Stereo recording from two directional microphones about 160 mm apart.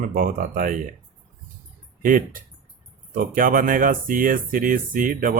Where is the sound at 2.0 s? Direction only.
60° right (ahead or behind).